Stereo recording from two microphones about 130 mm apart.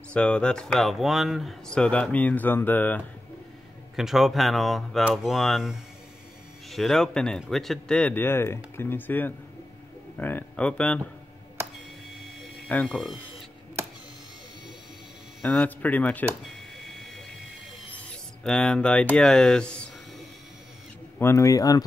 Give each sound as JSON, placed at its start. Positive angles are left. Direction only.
{"t": 0.1, "sound": "speech", "side_deg": 10}
{"t": 3.9, "sound": "speech", "side_deg": 0}
{"t": 12.6, "sound": "speech", "side_deg": 10}
{"t": 15.4, "sound": "speech", "side_deg": 10}
{"t": 16.8, "sound": "vehicle", "side_deg": 0}
{"t": 18.4, "sound": "speech", "side_deg": 5}
{"t": 21.2, "sound": "speech", "side_deg": 20}